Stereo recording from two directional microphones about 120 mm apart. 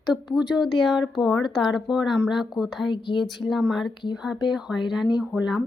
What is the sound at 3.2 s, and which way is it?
Speech, centre (ahead or behind).